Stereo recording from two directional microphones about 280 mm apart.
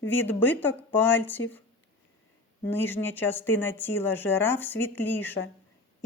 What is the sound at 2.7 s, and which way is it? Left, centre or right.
Speech, centre.